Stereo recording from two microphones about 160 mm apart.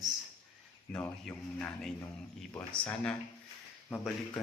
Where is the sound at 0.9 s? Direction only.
5° left (ahead or behind).